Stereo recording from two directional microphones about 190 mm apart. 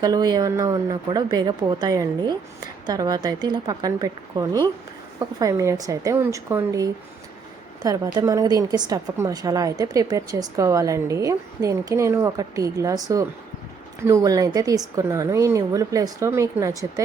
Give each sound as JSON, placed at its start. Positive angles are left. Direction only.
{"t": 0.0, "sound": "a woman's voice", "side_deg": -20}
{"t": 7.9, "sound": "a woman's voice", "side_deg": -15}